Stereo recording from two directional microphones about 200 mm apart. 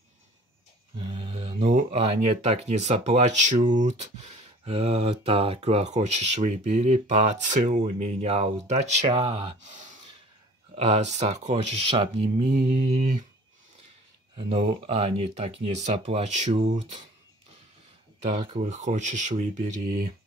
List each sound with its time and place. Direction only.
0.9 s speech: 30° right (ahead or behind)
14.3 s speech: 30° right (ahead or behind)
18.2 s speech: 30° right (ahead or behind)